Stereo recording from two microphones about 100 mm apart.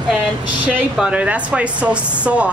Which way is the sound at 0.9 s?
10° right (ahead or behind).